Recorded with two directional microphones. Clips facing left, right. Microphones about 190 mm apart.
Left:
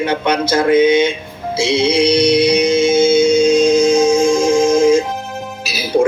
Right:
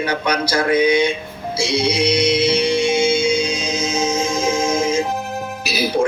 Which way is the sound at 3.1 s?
45° left (ahead or behind).